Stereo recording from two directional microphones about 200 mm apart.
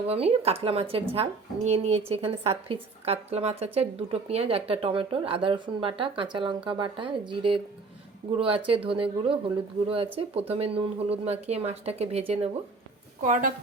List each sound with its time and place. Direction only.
0.1 s speech: 30° right (ahead or behind)